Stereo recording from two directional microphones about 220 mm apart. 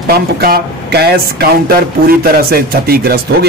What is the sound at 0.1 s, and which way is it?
A man's voice, 45° right (ahead or behind).